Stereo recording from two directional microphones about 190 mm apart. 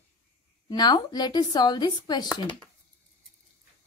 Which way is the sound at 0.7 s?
20° left (ahead or behind).